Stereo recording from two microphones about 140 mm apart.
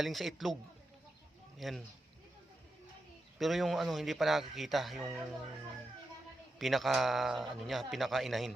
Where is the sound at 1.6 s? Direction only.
Centre (ahead or behind).